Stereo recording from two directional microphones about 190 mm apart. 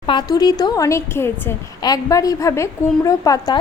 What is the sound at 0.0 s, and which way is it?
A woman's voice, 25° left (ahead or behind).